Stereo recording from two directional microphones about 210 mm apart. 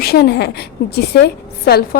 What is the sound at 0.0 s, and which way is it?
A woman's voice, 50° left (ahead or behind).